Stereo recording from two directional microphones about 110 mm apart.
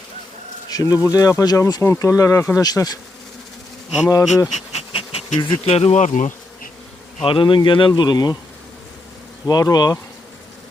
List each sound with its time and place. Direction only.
0.7 s bee: 35° left (ahead or behind)
1.0 s speech: 30° left (ahead or behind)
4.5 s bee: 65° left (ahead or behind)
5.7 s speech: 75° left (ahead or behind); by 6.3 s 90° left
7.2 s insect: 50° left (ahead or behind)
9.5 s bee: 35° left (ahead or behind)